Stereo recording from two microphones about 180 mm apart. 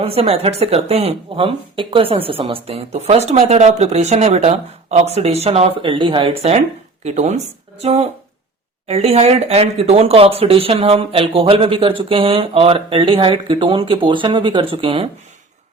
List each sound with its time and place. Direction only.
0.0 s speech: 35° right (ahead or behind)